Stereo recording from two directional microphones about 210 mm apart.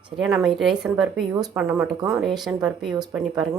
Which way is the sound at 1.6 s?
Centre (ahead or behind).